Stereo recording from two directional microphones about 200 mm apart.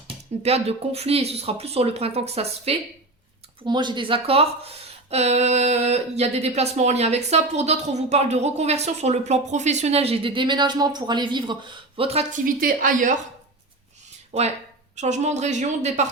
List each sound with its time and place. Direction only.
0.4 s speech: 30° right (ahead or behind)
12.5 s a woman's voice: 45° right (ahead or behind)
14.3 s speech: 30° right (ahead or behind)